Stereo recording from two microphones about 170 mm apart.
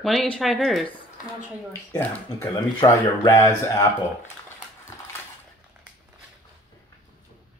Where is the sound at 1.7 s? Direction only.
15° left (ahead or behind).